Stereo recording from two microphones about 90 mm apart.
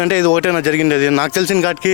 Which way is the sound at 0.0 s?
20° left (ahead or behind).